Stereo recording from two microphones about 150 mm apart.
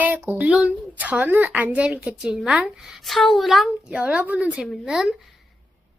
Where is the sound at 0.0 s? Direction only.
10° right (ahead or behind).